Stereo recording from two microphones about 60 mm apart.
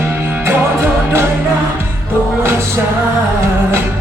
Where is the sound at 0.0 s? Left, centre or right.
Right.